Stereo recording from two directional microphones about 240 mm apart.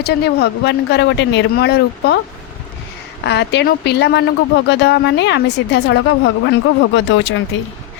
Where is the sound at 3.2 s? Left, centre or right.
Left.